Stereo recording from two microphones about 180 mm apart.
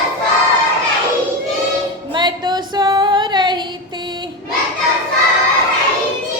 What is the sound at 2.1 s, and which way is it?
Music, 25° right (ahead or behind).